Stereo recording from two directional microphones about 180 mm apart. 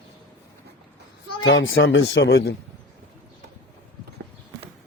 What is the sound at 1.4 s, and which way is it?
Speech, 90° left.